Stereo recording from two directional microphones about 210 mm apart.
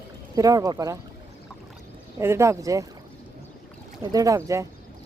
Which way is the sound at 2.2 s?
10° right (ahead or behind).